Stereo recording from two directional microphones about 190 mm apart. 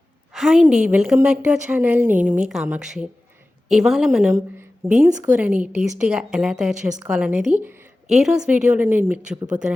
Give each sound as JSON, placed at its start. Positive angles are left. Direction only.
{"t": 0.3, "sound": "a woman's voice", "side_deg": 0}
{"t": 4.8, "sound": "speech", "side_deg": -50}
{"t": 5.2, "sound": "a woman's voice", "side_deg": -10}